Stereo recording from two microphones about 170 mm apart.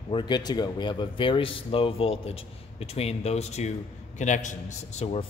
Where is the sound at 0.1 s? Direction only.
25° left (ahead or behind).